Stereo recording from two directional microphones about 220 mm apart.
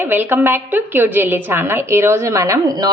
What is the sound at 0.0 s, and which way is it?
Speech, 10° right (ahead or behind).